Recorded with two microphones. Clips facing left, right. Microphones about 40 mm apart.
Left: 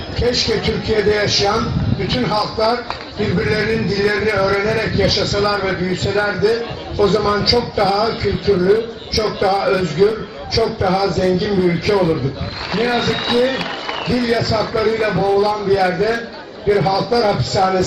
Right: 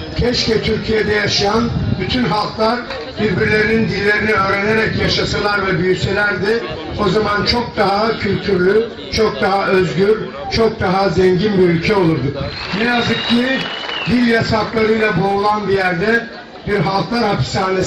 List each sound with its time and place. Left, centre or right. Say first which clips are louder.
0.2 s a man's voice: right 2 dB; centre
2.1 s a man's voice: right 2 dB; centre